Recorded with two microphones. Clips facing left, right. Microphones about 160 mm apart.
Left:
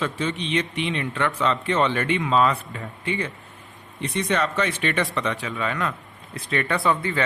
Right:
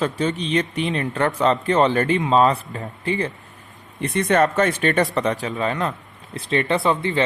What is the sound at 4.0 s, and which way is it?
Speech, 50° right (ahead or behind).